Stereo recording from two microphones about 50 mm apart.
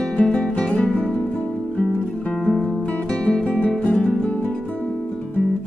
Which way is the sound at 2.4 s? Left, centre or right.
Centre.